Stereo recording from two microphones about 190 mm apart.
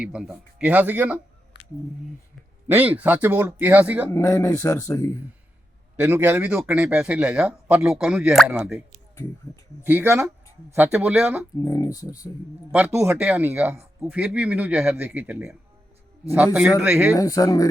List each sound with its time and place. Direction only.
0.0 s speech: 5° right (ahead or behind)
2.6 s speech: 10° right (ahead or behind)
4.1 s speech: 15° left (ahead or behind)
6.0 s speech: 10° right (ahead or behind)
9.8 s speech: 10° right (ahead or behind)
11.6 s speech: 15° left (ahead or behind)
12.7 s speech: 10° right (ahead or behind)
16.8 s speech: 10° right (ahead or behind)
17.2 s speech: 20° left (ahead or behind)